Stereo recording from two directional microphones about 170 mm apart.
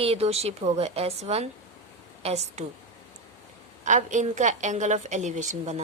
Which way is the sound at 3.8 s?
45° right (ahead or behind).